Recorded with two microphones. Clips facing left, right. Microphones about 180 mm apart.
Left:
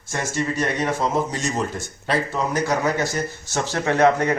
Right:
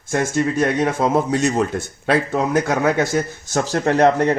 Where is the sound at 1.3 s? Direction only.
60° right (ahead or behind).